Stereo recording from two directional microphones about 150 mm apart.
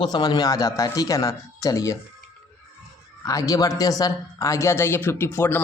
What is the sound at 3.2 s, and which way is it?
A man's voice, 25° left (ahead or behind).